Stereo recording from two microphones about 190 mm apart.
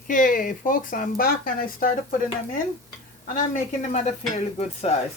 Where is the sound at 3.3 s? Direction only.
40° left (ahead or behind).